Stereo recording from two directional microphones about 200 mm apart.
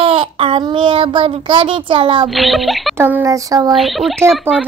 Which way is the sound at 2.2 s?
Centre (ahead or behind).